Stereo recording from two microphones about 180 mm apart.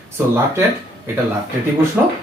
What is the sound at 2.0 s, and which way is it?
Speech, 10° right (ahead or behind).